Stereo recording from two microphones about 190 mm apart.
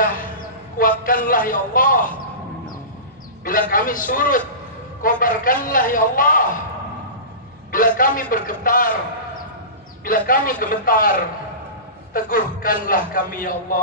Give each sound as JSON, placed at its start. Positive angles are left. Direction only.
{"t": 0.0, "sound": "a sound", "side_deg": 45}
{"t": 0.7, "sound": "a man's voice", "side_deg": 45}
{"t": 3.4, "sound": "a man's voice", "side_deg": 45}
{"t": 8.0, "sound": "a man's voice", "side_deg": 45}
{"t": 10.0, "sound": "a man's voice", "side_deg": 45}